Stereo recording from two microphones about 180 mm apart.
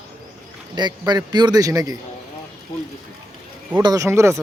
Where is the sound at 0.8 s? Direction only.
25° right (ahead or behind).